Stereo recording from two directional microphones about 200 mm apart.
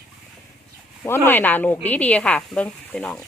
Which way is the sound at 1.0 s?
10° left (ahead or behind).